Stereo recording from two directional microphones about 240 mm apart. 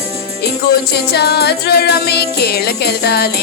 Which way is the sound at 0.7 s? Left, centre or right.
Left.